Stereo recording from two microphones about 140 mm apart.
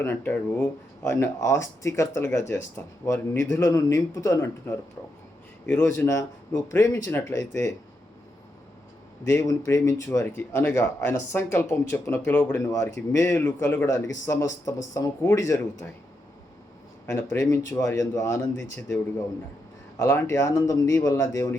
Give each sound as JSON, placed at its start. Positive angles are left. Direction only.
{"t": 0.0, "sound": "speech", "side_deg": 15}
{"t": 5.8, "sound": "speech", "side_deg": 20}
{"t": 9.2, "sound": "speech", "side_deg": 20}
{"t": 17.1, "sound": "speech", "side_deg": 20}
{"t": 20.0, "sound": "speech", "side_deg": 20}